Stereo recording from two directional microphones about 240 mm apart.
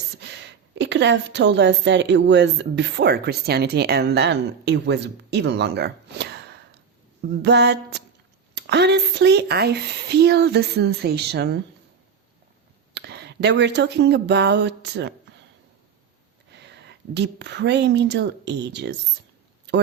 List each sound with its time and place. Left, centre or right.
0.2 s a woman's voice: right
7.4 s a sound: right
8.5 s speech: right
12.9 s speech: right
16.5 s speech: right
19.7 s a sound: right